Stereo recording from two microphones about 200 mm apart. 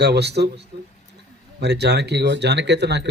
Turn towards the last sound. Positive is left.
turn(degrees=-60)  # may be behind; listen again after turning